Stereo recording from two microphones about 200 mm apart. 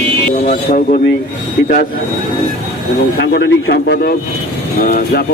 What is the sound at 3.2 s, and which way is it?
A man's voice, 55° left (ahead or behind).